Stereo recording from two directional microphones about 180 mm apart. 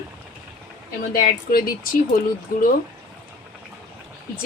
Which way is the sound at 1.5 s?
55° left (ahead or behind).